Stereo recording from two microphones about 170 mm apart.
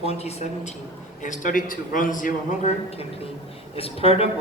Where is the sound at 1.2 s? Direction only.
50° left (ahead or behind).